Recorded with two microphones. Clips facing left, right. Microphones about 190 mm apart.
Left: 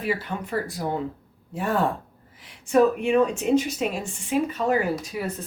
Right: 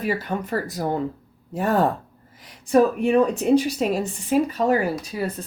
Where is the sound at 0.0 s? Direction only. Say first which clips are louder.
Right 3 dB; 45° right (ahead or behind).